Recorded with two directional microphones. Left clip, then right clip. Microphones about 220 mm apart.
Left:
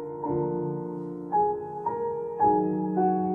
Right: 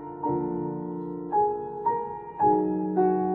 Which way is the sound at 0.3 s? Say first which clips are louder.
Left 1 dB; 25° right (ahead or behind).